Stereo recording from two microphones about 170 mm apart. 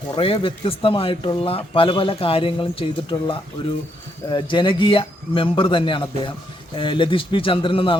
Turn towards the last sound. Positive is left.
turn(degrees=30)  # may be behind; listen again after turning